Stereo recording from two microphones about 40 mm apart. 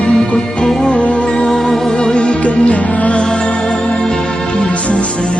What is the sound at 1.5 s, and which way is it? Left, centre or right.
Music, centre.